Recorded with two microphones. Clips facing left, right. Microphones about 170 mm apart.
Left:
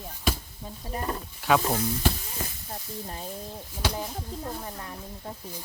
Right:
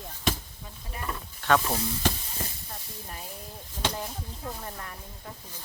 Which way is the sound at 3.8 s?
10° left (ahead or behind).